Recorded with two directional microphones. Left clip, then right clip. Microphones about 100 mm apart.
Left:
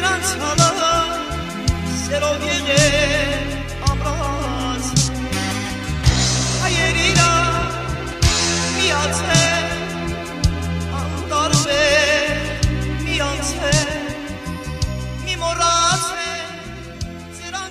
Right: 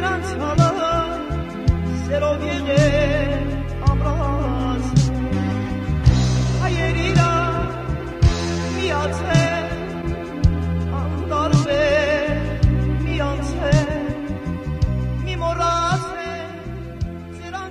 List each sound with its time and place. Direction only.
0.0 s music: 40° right (ahead or behind)
11.3 s music: 40° right (ahead or behind)
13.1 s music: 40° right (ahead or behind)
15.4 s music: 45° right (ahead or behind)